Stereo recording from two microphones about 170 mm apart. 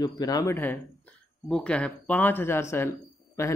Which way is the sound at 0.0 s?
20° left (ahead or behind).